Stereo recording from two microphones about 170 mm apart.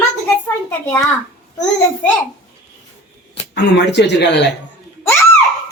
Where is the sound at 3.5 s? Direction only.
90° left.